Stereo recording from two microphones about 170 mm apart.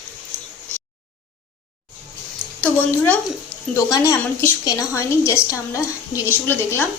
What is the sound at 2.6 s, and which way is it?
A woman's voice, 10° left (ahead or behind).